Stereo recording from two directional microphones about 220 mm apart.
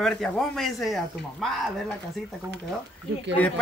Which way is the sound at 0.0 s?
Centre (ahead or behind).